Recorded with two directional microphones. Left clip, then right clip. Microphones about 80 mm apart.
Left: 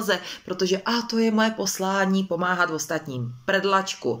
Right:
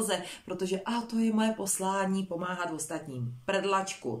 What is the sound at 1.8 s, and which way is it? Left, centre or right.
Speech, right.